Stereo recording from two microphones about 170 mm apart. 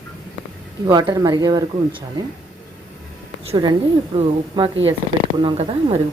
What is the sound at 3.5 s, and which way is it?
Speech, 25° right (ahead or behind).